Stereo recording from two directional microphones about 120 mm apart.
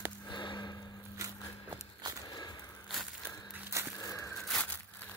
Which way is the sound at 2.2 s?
30° left (ahead or behind).